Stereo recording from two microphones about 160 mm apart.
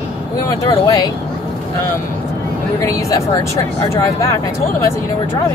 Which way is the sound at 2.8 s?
20° left (ahead or behind).